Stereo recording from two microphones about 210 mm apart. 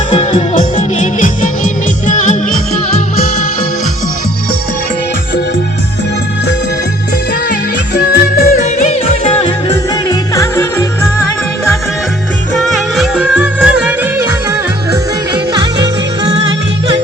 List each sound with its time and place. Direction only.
0.1 s music: 30° left (ahead or behind)
7.9 s music: 45° left (ahead or behind)
8.9 s music: 30° left (ahead or behind)
10.1 s music: 15° left (ahead or behind)
12.6 s music: 5° right (ahead or behind)